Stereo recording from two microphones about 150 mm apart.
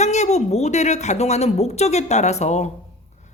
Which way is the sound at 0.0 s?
50° left (ahead or behind).